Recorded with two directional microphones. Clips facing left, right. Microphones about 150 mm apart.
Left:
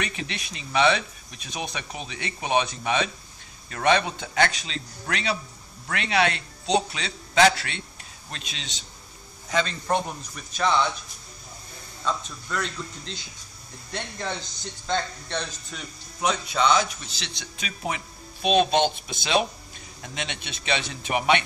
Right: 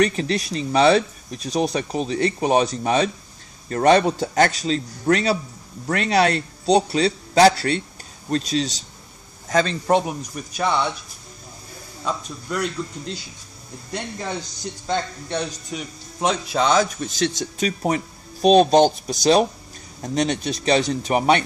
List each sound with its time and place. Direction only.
0.0 s speech: 40° right (ahead or behind)
9.8 s a man's voice: 20° right (ahead or behind)
12.0 s a man's voice: 10° right (ahead or behind)
16.2 s speech: 35° right (ahead or behind)